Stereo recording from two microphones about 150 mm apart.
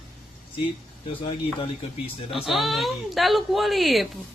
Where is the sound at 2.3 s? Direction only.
Centre (ahead or behind).